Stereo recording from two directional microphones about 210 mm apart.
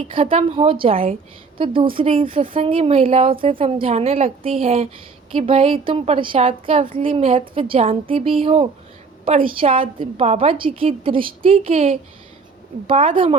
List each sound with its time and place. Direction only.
0.1 s a woman's voice: 25° right (ahead or behind)